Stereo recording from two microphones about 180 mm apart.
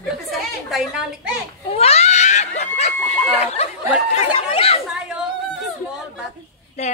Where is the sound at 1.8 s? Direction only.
35° left (ahead or behind).